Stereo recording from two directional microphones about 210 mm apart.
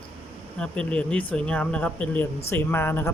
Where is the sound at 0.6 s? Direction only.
5° left (ahead or behind).